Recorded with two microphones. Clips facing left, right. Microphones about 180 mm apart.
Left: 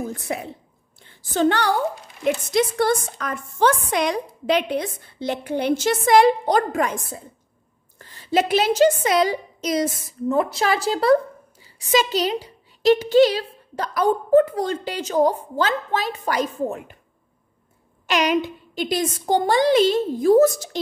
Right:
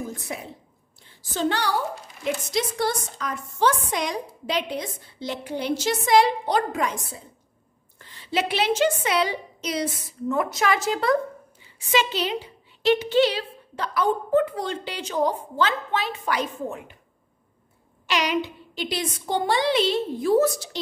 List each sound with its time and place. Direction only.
0.3 s a woman's voice: 60° left (ahead or behind); by 10.3 s 45° left (ahead or behind)
10.3 s a woman's voice: 30° left (ahead or behind)
18.0 s a woman's voice: 50° left (ahead or behind)